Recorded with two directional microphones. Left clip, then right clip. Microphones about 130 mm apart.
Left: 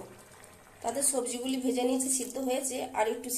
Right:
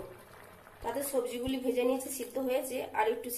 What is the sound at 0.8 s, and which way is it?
A woman's voice, 25° left (ahead or behind).